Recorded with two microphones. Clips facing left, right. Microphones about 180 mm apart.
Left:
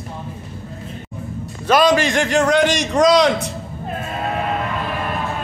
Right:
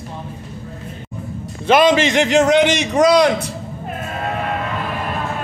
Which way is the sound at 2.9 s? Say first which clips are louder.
Right 1 dB; 5° right (ahead or behind).